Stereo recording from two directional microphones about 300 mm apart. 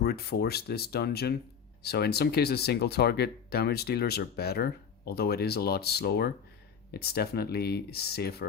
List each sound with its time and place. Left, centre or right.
0.0 s speech: left